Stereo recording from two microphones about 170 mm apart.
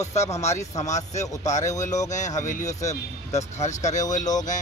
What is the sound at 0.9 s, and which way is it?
Speech, 45° left (ahead or behind).